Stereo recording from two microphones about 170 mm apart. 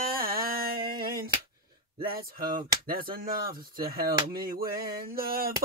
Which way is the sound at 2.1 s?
60° right (ahead or behind).